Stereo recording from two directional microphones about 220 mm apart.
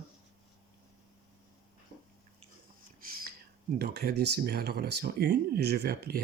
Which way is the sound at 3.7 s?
45° right (ahead or behind).